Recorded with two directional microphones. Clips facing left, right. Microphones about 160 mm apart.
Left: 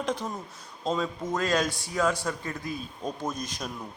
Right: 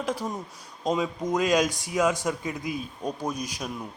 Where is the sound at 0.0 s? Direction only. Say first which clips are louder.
Right 1 dB; 5° right (ahead or behind).